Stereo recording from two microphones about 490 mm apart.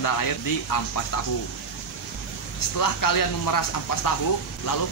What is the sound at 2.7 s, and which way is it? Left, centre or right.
Speech, left.